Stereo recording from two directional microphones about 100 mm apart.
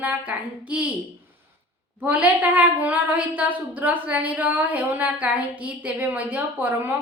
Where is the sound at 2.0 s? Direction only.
15° right (ahead or behind).